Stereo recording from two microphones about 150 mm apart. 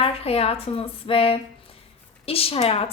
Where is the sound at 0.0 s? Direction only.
40° left (ahead or behind).